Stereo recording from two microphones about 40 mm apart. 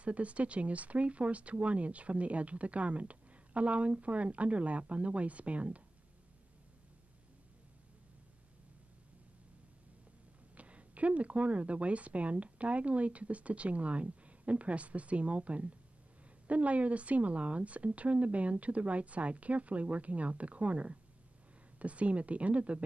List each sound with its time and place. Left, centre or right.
0.0 s speech: right
10.5 s speech: right